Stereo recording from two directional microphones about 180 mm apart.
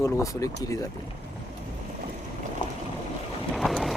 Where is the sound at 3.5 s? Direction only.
Centre (ahead or behind).